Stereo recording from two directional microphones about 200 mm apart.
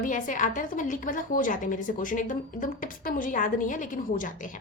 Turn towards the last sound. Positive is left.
turn(degrees=40)  # may be behind; listen again after turning